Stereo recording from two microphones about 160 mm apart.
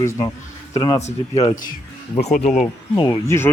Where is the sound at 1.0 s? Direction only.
45° left (ahead or behind).